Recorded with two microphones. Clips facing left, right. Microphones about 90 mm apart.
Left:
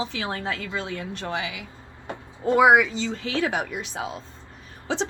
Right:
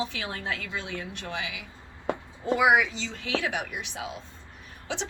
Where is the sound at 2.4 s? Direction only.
45° left (ahead or behind).